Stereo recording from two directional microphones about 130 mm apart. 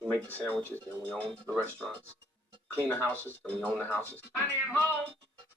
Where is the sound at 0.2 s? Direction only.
15° right (ahead or behind).